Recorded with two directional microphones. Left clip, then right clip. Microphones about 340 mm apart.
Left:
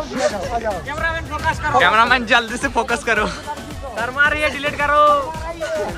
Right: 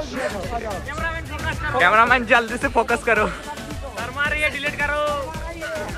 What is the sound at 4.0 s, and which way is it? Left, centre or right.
Music, left.